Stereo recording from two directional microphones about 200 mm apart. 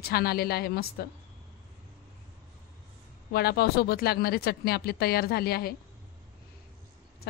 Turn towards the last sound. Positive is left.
turn(degrees=50)  # may be behind; listen again after turning